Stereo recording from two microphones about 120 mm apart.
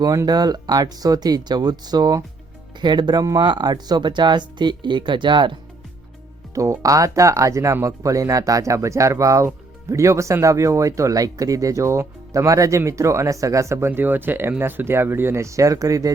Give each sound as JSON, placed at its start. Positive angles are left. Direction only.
{"t": 0.0, "sound": "speech", "side_deg": -30}
{"t": 6.5, "sound": "speech", "side_deg": -25}